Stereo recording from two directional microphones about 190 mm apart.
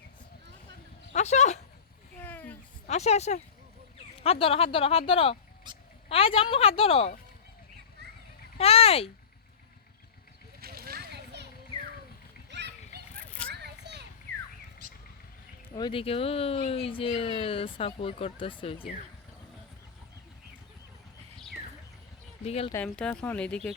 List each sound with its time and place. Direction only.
1.1 s speech: 35° left (ahead or behind)
2.2 s a sound: 10° left (ahead or behind)
2.8 s speech: 35° left (ahead or behind)
5.7 s a sound: 25° right (ahead or behind)
6.1 s speech: 30° left (ahead or behind)
8.5 s a sound: 30° left (ahead or behind)
10.6 s a sound: 55° right (ahead or behind)
12.5 s splash: 65° right (ahead or behind)
13.2 s children playing: 5° left (ahead or behind)
13.5 s children playing: 60° right (ahead or behind)
15.7 s speech: 25° left (ahead or behind)
22.4 s speech: 30° left (ahead or behind)
22.7 s speech: 5° left (ahead or behind)